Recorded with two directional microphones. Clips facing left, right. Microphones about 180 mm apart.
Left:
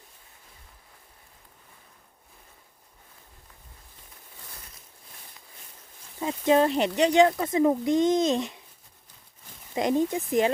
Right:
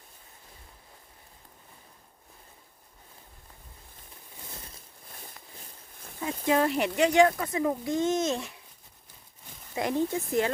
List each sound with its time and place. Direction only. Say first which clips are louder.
6.1 s speech: left 4 dB; 25° left (ahead or behind)
9.7 s speech: left 3 dB; 20° left (ahead or behind)